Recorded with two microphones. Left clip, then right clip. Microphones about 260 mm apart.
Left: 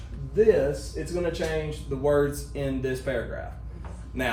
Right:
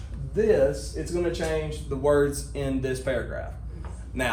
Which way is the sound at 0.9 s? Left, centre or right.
Centre.